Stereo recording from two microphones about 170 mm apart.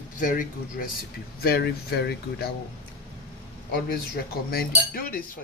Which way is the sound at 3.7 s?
60° left (ahead or behind).